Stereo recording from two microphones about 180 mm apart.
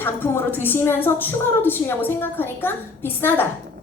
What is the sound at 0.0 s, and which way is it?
A woman's voice, 10° left (ahead or behind).